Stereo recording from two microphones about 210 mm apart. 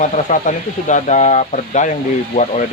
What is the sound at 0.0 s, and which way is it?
Speech, 35° left (ahead or behind).